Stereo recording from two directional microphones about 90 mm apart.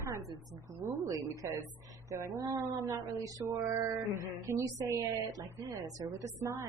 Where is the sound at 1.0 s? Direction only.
40° right (ahead or behind).